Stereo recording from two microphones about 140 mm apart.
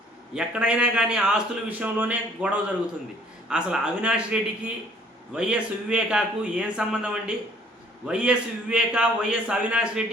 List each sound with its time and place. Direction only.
0.3 s a man's voice: 5° right (ahead or behind)